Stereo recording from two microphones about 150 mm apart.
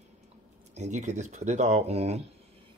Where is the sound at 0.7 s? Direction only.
50° right (ahead or behind).